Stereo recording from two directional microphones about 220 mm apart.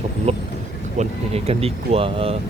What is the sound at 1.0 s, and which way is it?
Speech, 30° right (ahead or behind).